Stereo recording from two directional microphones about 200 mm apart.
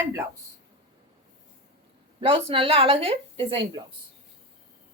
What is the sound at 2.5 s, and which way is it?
A woman's voice, 25° right (ahead or behind).